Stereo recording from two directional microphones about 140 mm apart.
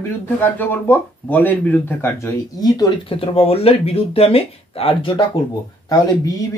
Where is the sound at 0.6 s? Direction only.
15° left (ahead or behind).